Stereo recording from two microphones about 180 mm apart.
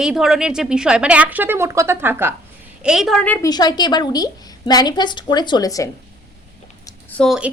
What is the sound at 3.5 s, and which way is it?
A woman's voice, 25° left (ahead or behind).